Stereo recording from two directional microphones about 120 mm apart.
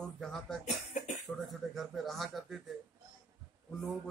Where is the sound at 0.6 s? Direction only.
80° left.